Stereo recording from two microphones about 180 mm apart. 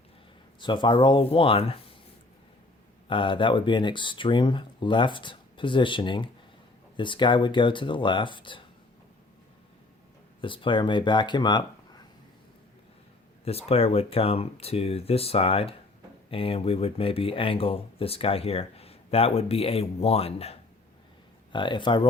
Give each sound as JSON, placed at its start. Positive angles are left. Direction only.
{"t": 0.6, "sound": "speech", "side_deg": 25}
{"t": 3.1, "sound": "speech", "side_deg": 30}
{"t": 10.4, "sound": "speech", "side_deg": 30}
{"t": 13.4, "sound": "speech", "side_deg": 35}